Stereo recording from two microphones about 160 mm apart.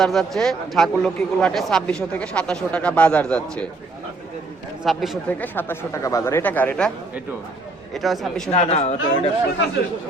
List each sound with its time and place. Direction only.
0.0 s speech: centre (ahead or behind)
4.8 s speech: centre (ahead or behind)
5.4 s speech: 10° left (ahead or behind)
7.9 s speech: centre (ahead or behind)
8.4 s speech: 45° left (ahead or behind)